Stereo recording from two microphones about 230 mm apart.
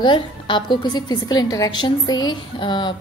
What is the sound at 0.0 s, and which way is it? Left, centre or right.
A woman's voice, left.